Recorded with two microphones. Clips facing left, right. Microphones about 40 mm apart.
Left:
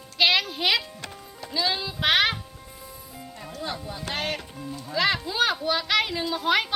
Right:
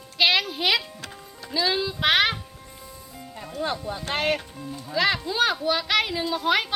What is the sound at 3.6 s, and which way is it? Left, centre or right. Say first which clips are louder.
Speech: right 5 dB; right.